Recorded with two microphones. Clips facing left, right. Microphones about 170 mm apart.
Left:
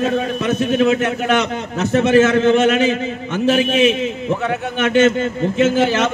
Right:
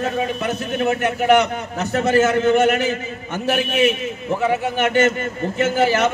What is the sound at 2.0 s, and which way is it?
A man's voice, 85° left.